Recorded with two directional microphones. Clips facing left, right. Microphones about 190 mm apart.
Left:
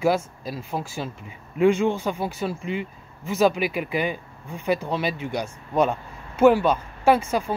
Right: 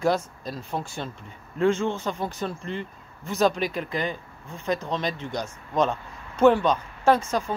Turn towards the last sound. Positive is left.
turn(degrees=10)  # may be behind; listen again after turning